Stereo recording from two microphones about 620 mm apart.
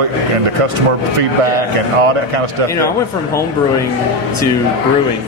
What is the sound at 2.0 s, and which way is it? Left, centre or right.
Speech, right.